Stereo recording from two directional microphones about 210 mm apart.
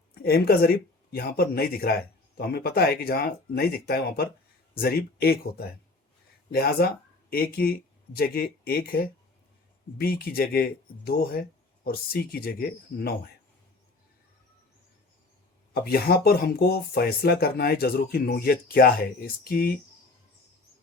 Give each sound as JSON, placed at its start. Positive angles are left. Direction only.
{"t": 0.1, "sound": "speech", "side_deg": 45}
{"t": 15.7, "sound": "speech", "side_deg": 50}